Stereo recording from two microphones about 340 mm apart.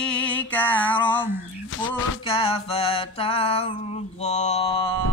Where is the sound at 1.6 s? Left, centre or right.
Left.